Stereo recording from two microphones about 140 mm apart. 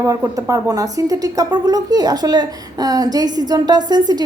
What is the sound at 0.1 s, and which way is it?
Speech, 25° right (ahead or behind).